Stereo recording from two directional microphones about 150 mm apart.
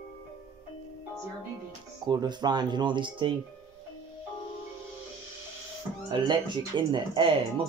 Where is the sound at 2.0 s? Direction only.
30° right (ahead or behind).